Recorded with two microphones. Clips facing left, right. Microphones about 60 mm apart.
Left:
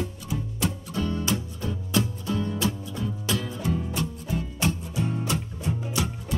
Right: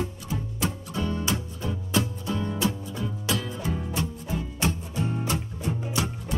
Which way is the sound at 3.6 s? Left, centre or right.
Centre.